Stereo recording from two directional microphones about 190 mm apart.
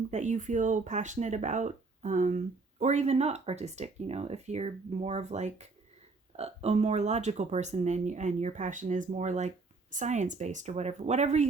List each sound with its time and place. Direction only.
0.1 s speech: 40° right (ahead or behind)